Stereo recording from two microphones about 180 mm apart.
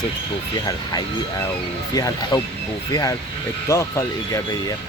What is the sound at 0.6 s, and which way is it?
Speech, 25° left (ahead or behind).